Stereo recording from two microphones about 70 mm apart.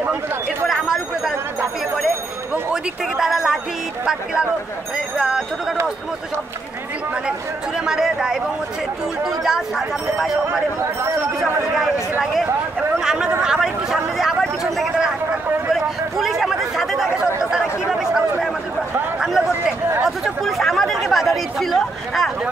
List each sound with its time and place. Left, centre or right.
0.0 s speech: right
0.7 s chatter: centre
2.7 s speech: centre
7.2 s speech: centre
13.0 s speech: centre
14.6 s a sound: centre
15.7 s chatter: centre
19.1 s a sound: centre
20.0 s chatter: centre